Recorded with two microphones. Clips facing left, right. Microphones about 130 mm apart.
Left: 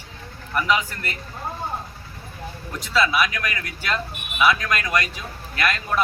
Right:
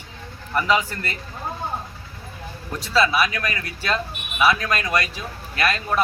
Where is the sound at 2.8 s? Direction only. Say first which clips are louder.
Right 1 dB; 35° right (ahead or behind).